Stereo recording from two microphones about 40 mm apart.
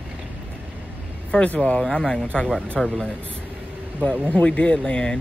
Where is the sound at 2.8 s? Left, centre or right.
Centre.